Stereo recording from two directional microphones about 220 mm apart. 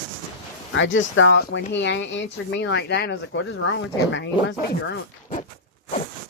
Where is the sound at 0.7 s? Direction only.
60° left (ahead or behind).